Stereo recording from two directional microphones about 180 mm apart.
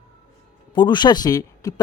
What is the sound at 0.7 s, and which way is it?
Speech, 25° left (ahead or behind).